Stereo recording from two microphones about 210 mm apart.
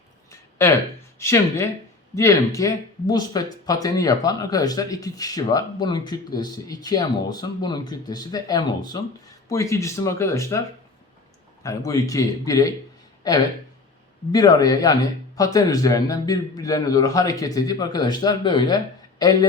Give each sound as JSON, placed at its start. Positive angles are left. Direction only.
{"t": 1.2, "sound": "speech", "side_deg": 15}
{"t": 11.6, "sound": "a man's voice", "side_deg": 15}